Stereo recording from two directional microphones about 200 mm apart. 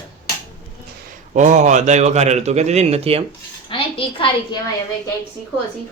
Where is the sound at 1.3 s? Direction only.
40° right (ahead or behind).